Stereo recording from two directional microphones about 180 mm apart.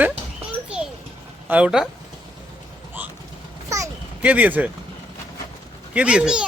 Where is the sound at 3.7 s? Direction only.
15° right (ahead or behind).